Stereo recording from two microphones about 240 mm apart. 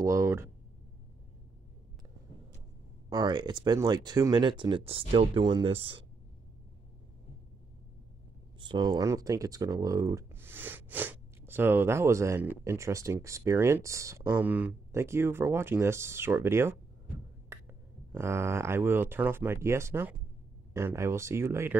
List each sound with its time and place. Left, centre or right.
0.0 s speech: centre
3.1 s speech: centre
8.5 s speech: centre